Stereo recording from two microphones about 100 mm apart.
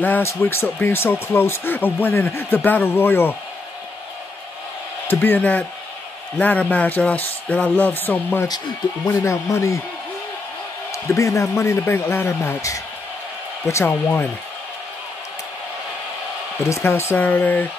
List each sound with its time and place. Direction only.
0.0 s speech: 20° left (ahead or behind)
5.0 s speech: 20° left (ahead or behind)
9.0 s speech: 30° left (ahead or behind)
11.1 s speech: 30° left (ahead or behind)
16.6 s speech: 25° left (ahead or behind)